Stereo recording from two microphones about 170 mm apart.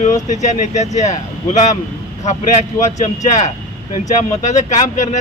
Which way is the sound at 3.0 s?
40° left (ahead or behind).